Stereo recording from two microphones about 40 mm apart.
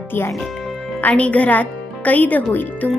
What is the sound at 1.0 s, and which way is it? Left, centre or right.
Speech, left.